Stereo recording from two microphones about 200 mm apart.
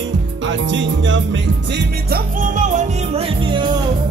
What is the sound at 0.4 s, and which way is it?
Music, 65° right (ahead or behind).